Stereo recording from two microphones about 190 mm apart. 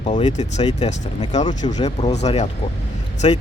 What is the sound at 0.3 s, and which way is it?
Speech, 35° left (ahead or behind).